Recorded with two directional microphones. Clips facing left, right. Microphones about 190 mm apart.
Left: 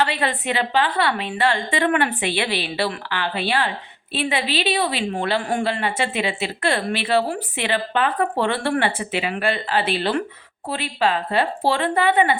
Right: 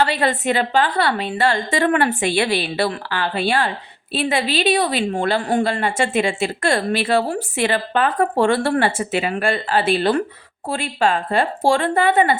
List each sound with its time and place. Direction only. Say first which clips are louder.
0.0 s a woman's voice: right 4 dB; 40° right (ahead or behind)